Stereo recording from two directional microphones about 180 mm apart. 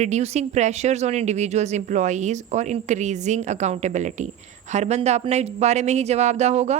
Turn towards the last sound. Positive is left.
turn(degrees=-35)  # may be behind; listen again after turning